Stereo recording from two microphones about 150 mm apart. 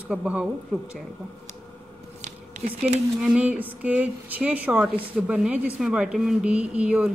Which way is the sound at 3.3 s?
10° right (ahead or behind).